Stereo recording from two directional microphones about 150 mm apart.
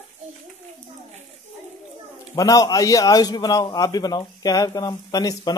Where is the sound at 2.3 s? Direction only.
25° left (ahead or behind).